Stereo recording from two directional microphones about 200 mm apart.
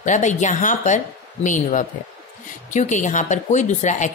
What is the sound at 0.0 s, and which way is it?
A woman's voice, 35° left (ahead or behind).